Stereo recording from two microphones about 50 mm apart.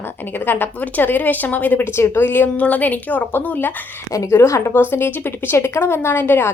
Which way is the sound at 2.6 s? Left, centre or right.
Left.